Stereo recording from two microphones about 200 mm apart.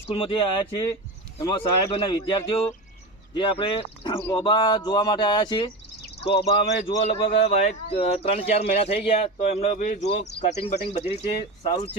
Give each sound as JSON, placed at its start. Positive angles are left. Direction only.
{"t": 0.1, "sound": "speech", "side_deg": 25}